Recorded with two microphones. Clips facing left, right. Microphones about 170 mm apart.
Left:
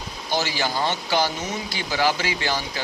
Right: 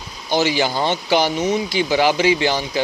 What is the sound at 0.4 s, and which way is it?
Speech, 20° right (ahead or behind).